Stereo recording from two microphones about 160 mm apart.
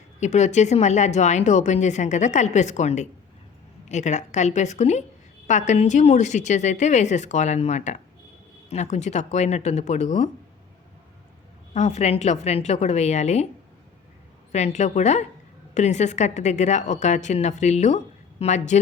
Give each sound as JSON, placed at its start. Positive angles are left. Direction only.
{"t": 0.2, "sound": "a woman's voice", "side_deg": 45}
{"t": 11.7, "sound": "a woman's voice", "side_deg": 45}
{"t": 14.5, "sound": "a woman's voice", "side_deg": 45}